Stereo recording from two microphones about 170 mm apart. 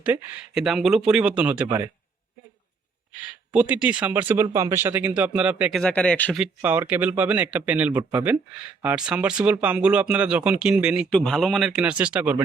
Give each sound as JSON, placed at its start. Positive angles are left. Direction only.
{"t": 0.0, "sound": "speech", "side_deg": -10}
{"t": 1.6, "sound": "a man's voice", "side_deg": -20}
{"t": 3.5, "sound": "speech", "side_deg": -10}
{"t": 5.8, "sound": "speech", "side_deg": 5}
{"t": 6.3, "sound": "speech", "side_deg": -10}